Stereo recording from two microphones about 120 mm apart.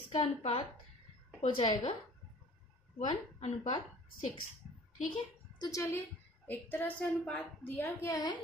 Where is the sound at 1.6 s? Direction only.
40° left (ahead or behind).